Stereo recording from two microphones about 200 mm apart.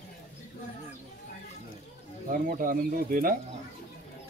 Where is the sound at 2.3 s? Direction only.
45° right (ahead or behind).